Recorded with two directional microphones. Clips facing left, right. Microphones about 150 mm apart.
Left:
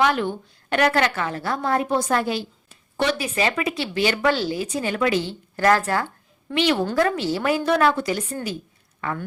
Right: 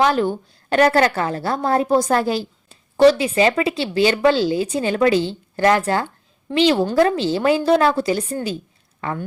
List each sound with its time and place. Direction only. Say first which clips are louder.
0.0 s a woman's voice: right 4 dB; 35° right (ahead or behind)